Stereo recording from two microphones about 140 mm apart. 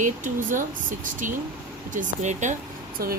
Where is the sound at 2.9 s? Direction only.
90° right.